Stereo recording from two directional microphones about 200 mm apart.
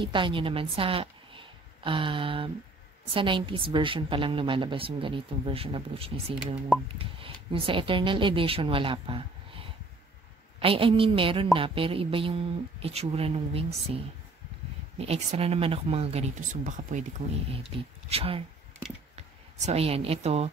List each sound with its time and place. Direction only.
0.0 s a woman's voice: 25° right (ahead or behind)
18.1 s a woman's voice: 30° right (ahead or behind)
19.6 s speech: 30° right (ahead or behind)